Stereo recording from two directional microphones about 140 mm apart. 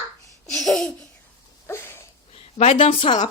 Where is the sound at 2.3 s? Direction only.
45° left (ahead or behind).